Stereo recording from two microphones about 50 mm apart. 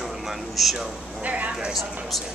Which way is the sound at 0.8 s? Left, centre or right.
Right.